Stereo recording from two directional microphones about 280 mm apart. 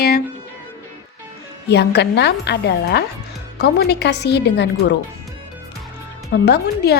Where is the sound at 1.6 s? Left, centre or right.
Left.